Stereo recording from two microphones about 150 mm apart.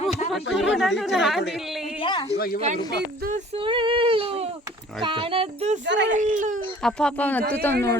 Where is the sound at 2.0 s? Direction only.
30° left (ahead or behind).